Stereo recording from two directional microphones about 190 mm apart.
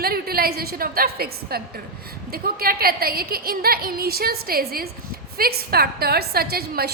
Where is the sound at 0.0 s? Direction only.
55° right (ahead or behind).